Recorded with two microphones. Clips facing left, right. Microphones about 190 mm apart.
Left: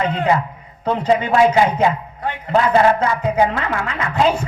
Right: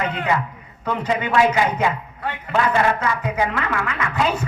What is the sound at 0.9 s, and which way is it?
A man's voice, 30° left (ahead or behind).